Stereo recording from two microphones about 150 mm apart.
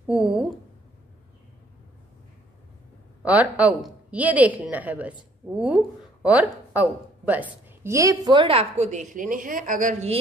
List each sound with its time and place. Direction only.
3.2 s speech: 10° right (ahead or behind); by 9.0 s 50° right (ahead or behind)
9.1 s a woman's voice: 65° right (ahead or behind)